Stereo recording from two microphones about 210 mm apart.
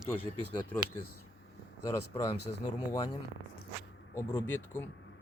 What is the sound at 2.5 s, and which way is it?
Speech, 30° left (ahead or behind).